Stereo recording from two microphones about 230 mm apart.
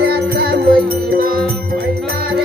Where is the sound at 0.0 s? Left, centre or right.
Right.